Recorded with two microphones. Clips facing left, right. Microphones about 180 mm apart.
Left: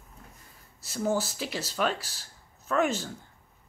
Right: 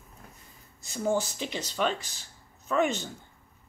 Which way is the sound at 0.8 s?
5° left (ahead or behind).